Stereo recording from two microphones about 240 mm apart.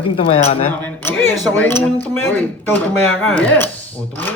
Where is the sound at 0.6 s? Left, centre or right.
Centre.